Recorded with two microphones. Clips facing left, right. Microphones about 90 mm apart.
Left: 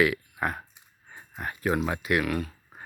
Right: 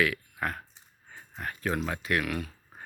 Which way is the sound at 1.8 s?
15° left (ahead or behind).